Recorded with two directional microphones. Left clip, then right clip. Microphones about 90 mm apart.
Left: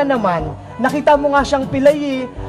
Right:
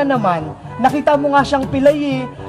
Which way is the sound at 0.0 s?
25° left (ahead or behind).